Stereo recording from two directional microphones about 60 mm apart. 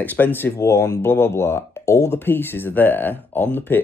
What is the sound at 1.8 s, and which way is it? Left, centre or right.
Speech, left.